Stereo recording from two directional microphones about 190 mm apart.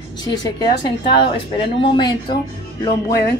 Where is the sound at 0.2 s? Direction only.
20° left (ahead or behind).